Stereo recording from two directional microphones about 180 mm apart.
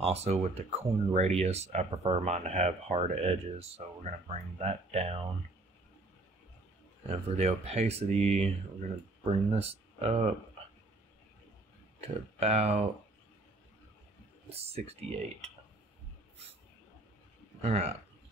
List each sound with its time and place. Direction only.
0.0 s speech: 35° right (ahead or behind)
7.1 s speech: 35° right (ahead or behind)
12.4 s speech: 35° right (ahead or behind)
14.5 s speech: 35° right (ahead or behind)
17.6 s speech: 35° right (ahead or behind)